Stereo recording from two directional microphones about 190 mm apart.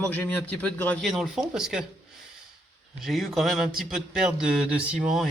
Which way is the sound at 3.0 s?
Centre (ahead or behind).